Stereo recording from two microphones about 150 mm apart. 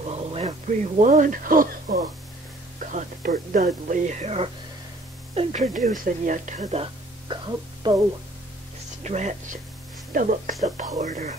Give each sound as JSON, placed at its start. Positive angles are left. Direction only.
{"t": 0.0, "sound": "a sound", "side_deg": -40}
{"t": 1.0, "sound": "speech", "side_deg": -60}
{"t": 9.0, "sound": "speech", "side_deg": -50}
{"t": 10.1, "sound": "speech", "side_deg": -65}
{"t": 11.0, "sound": "speech", "side_deg": -50}